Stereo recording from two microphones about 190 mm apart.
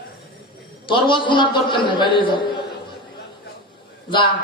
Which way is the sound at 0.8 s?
25° left (ahead or behind).